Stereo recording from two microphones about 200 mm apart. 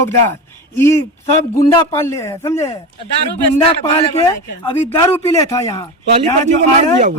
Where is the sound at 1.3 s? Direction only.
25° left (ahead or behind).